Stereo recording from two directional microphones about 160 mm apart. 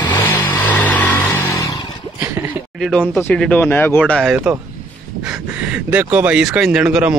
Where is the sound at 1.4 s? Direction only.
20° left (ahead or behind).